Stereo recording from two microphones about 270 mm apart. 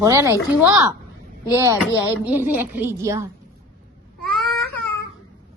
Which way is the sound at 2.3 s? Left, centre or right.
Centre.